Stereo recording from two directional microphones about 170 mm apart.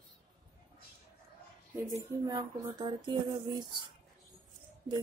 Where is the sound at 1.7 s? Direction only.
20° right (ahead or behind).